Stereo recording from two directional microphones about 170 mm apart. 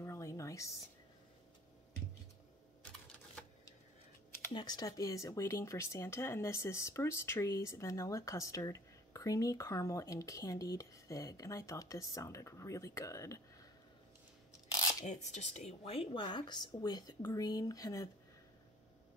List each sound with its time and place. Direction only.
0.0 s a sound: 15° left (ahead or behind)
4.5 s speech: 25° left (ahead or behind)
15.0 s speech: 45° left (ahead or behind); by 18.1 s 20° left (ahead or behind)